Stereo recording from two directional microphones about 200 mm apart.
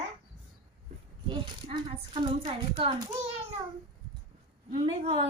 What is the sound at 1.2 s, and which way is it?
Speech, 25° right (ahead or behind).